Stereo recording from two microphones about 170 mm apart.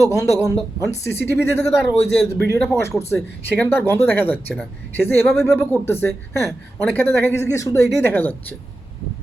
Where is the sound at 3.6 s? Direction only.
15° left (ahead or behind).